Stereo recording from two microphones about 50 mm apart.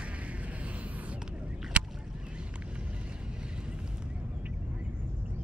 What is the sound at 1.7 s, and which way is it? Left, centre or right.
Rowboat, right.